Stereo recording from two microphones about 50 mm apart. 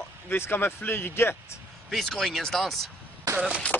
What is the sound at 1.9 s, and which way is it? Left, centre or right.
Speech, centre.